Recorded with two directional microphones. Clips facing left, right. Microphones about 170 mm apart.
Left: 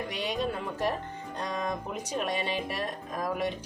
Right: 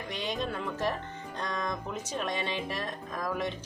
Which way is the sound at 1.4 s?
10° left (ahead or behind).